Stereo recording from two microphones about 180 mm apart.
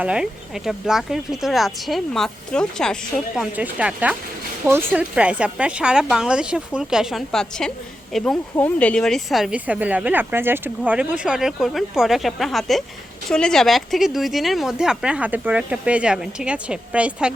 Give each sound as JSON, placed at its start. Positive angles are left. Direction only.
{"t": 0.0, "sound": "speech", "side_deg": -5}
{"t": 3.5, "sound": "speech", "side_deg": -10}